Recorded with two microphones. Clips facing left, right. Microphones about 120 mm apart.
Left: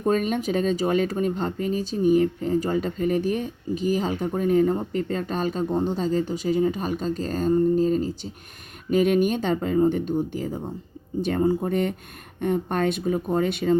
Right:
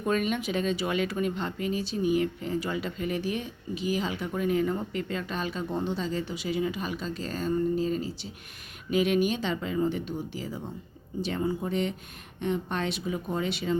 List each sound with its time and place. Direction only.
0.0 s speech: 40° left (ahead or behind)